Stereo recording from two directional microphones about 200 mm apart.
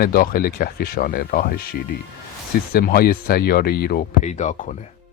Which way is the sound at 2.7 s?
50° left (ahead or behind).